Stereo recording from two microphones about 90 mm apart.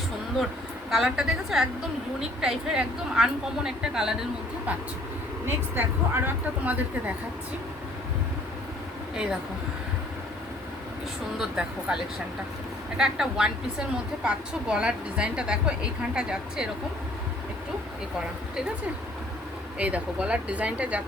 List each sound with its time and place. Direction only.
0.9 s a woman's voice: 5° right (ahead or behind)
5.5 s speech: 25° right (ahead or behind)
11.3 s a woman's voice: 10° right (ahead or behind)
13.0 s a woman's voice: 5° right (ahead or behind)
19.8 s a woman's voice: 15° right (ahead or behind)